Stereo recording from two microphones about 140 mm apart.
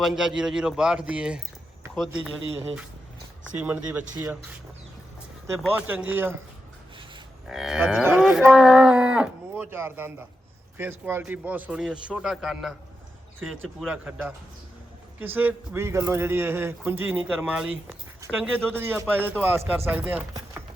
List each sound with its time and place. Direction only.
0.0 s a man's voice: 5° right (ahead or behind)
3.6 s speech: 10° right (ahead or behind)
5.5 s speech: 15° right (ahead or behind)
7.4 s a man's voice: 5° right (ahead or behind)
17.8 s speech: 15° right (ahead or behind)